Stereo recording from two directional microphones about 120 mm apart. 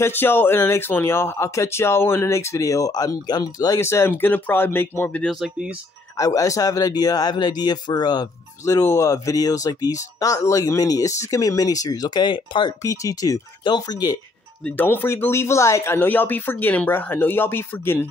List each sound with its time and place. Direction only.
0.0 s speech: 15° left (ahead or behind)
5.3 s speech: 5° right (ahead or behind)
6.1 s speech: 30° left (ahead or behind)
12.8 s speech: 25° left (ahead or behind)
14.6 s speech: 15° left (ahead or behind)